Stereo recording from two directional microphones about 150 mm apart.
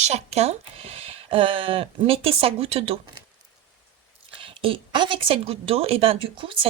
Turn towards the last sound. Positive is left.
turn(degrees=-35)  # may be behind; listen again after turning